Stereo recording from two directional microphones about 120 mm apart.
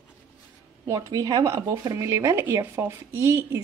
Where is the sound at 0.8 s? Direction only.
30° right (ahead or behind).